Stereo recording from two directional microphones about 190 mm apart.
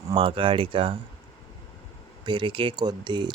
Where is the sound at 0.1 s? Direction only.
30° right (ahead or behind).